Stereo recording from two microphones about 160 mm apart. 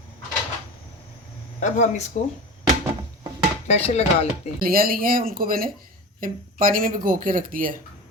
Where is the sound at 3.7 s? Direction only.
40° left (ahead or behind).